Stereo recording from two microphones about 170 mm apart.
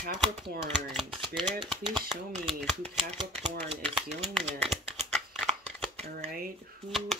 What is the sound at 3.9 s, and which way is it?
Speech, centre (ahead or behind).